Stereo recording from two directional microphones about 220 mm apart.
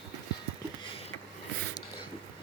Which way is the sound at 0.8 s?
25° left (ahead or behind).